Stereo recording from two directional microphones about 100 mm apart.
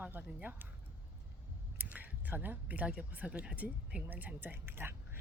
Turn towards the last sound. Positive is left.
turn(degrees=-25)  # may be behind; listen again after turning